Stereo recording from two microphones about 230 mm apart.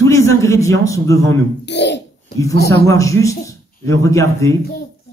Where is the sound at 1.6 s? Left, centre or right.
Left.